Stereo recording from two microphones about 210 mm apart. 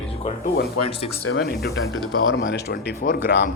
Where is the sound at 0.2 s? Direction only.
30° left (ahead or behind).